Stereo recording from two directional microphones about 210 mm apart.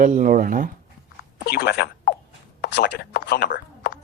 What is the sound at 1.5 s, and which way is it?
Speech, 50° left (ahead or behind).